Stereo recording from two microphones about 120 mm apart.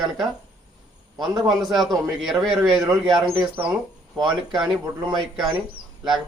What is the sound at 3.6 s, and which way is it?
Speech, 20° right (ahead or behind).